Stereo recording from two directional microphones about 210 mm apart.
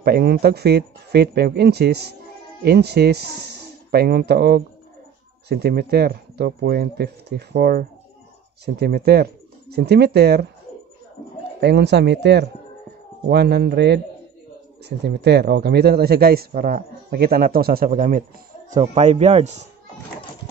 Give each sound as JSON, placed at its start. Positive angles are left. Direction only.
{"t": 0.0, "sound": "a man's voice", "side_deg": -50}
{"t": 11.6, "sound": "a man's voice", "side_deg": -55}